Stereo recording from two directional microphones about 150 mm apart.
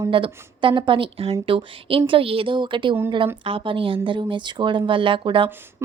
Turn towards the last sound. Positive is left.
turn(degrees=-35)  # may be behind; listen again after turning